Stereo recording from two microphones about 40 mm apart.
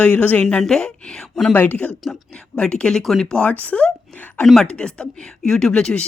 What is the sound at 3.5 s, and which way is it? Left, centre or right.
Speech, left.